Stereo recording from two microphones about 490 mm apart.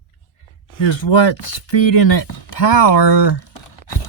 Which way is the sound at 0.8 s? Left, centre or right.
Left.